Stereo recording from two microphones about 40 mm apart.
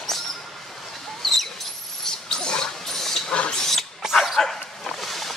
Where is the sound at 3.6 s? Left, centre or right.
Centre.